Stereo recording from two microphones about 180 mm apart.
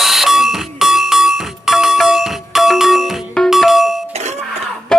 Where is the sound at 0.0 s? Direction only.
Centre (ahead or behind).